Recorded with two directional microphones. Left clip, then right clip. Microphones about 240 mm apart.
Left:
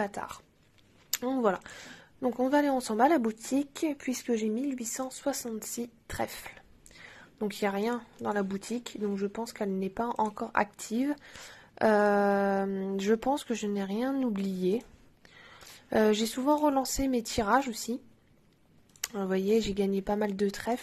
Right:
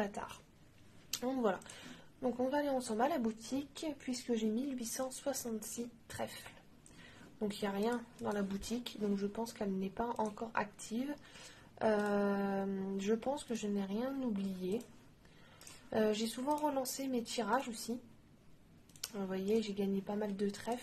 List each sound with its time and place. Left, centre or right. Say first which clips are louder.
0.0 s speech: left 7 dB; left
15.9 s speech: left 9 dB; left
19.1 s speech: left 9 dB; left